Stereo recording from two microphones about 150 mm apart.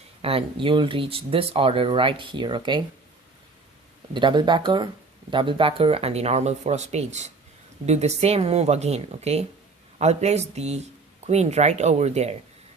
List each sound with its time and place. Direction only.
0.2 s speech: 40° right (ahead or behind)
4.1 s speech: 30° right (ahead or behind)